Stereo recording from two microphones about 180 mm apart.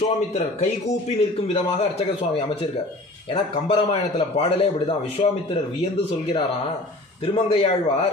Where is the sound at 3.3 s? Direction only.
30° left (ahead or behind).